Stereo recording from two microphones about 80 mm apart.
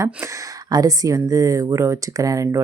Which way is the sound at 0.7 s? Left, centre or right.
Right.